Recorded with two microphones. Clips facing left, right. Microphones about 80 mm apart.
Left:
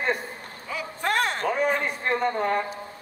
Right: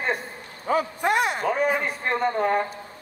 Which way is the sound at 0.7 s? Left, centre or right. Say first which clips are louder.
Right 11 dB; right.